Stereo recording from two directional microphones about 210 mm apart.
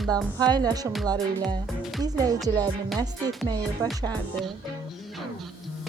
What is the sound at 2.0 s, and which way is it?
Speech, 15° right (ahead or behind).